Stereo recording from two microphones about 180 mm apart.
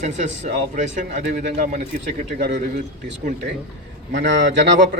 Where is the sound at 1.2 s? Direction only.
65° right (ahead or behind).